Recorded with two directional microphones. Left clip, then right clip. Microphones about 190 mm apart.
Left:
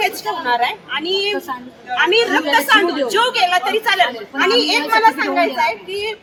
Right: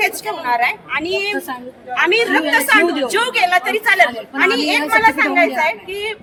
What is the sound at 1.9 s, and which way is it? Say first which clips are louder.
A woman's voice: even; 40° right (ahead or behind).